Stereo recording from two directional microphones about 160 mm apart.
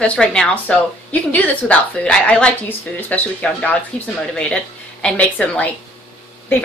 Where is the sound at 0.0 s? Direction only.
5° left (ahead or behind).